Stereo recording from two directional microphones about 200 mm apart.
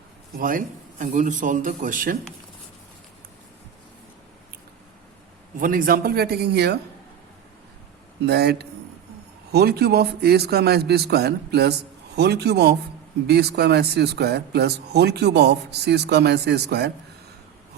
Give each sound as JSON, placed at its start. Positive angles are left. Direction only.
{"t": 0.3, "sound": "a man's voice", "side_deg": -45}
{"t": 5.5, "sound": "a man's voice", "side_deg": -45}
{"t": 8.3, "sound": "a man's voice", "side_deg": -55}